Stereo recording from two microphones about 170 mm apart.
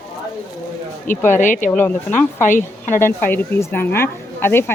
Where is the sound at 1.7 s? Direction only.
10° left (ahead or behind).